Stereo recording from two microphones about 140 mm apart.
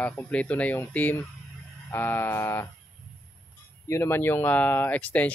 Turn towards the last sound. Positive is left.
turn(degrees=10)  # may be behind; listen again after turning